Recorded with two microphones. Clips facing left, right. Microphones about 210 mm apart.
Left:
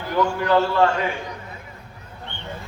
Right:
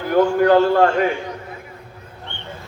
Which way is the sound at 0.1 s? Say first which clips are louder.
Right 6 dB; 50° right (ahead or behind).